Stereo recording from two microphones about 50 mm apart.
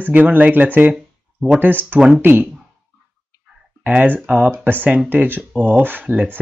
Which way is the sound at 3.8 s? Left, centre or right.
Right.